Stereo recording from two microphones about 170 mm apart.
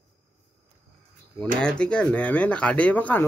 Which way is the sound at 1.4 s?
5° left (ahead or behind).